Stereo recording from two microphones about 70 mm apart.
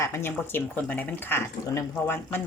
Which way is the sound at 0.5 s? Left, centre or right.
Left.